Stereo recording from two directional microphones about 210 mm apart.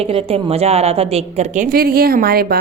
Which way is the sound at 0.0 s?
30° right (ahead or behind).